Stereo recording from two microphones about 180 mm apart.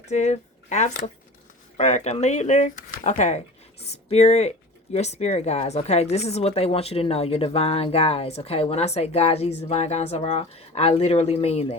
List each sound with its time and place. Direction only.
0.0 s speech: 40° left (ahead or behind)